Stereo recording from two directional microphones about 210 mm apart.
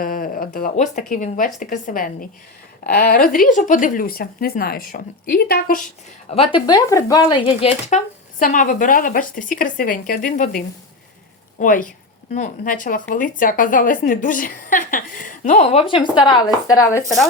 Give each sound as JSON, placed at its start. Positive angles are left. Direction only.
{"t": 0.0, "sound": "speech", "side_deg": 40}
{"t": 6.3, "sound": "speech", "side_deg": 25}
{"t": 11.6, "sound": "speech", "side_deg": 40}